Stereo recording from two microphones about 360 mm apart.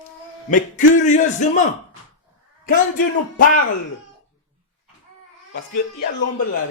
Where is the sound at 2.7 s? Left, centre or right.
Left.